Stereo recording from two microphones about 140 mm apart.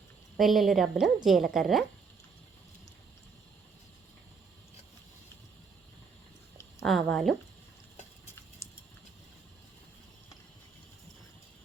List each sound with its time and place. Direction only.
0.3 s a woman's voice: centre (ahead or behind)
6.8 s a woman's voice: centre (ahead or behind)
8.6 s a sound: 20° left (ahead or behind)